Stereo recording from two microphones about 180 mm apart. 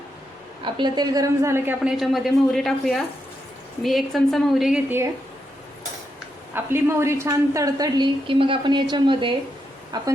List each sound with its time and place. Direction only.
0.6 s a woman's voice: 25° right (ahead or behind); by 5.0 s 5° right (ahead or behind)
6.5 s a woman's voice: 15° right (ahead or behind)